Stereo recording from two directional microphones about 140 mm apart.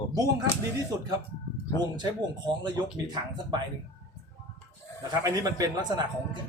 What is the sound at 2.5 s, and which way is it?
Speech, 30° right (ahead or behind).